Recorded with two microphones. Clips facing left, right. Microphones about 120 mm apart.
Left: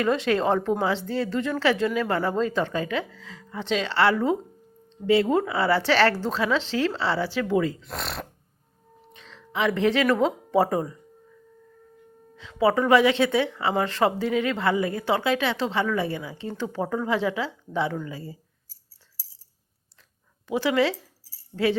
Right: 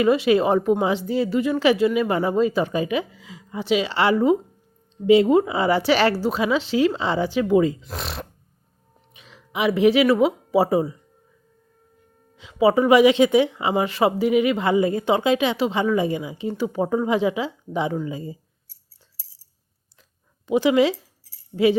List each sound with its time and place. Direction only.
0.0 s speech: 10° right (ahead or behind)
7.9 s speech: centre (ahead or behind)
9.1 s speech: 10° right (ahead or behind)
12.4 s speech: 15° right (ahead or behind)
20.5 s speech: 15° right (ahead or behind)